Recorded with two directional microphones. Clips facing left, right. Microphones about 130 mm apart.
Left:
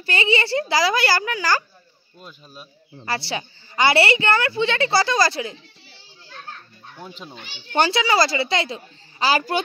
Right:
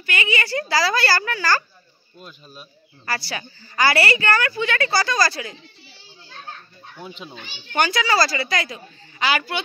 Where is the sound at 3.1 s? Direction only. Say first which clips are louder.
Left 2 dB; 25° left (ahead or behind).